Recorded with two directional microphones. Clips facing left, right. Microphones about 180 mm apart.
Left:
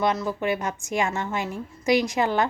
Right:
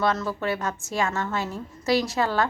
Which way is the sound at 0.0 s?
15° left (ahead or behind).